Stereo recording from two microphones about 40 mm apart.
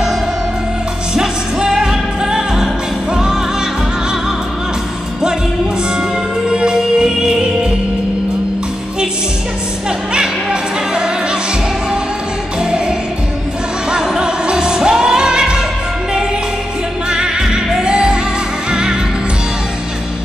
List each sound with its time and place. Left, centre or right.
1.1 s music: centre
6.5 s music: right
10.1 s music: right
13.8 s music: centre
17.1 s music: centre